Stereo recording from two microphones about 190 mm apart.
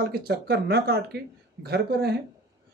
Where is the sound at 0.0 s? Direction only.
55° right (ahead or behind).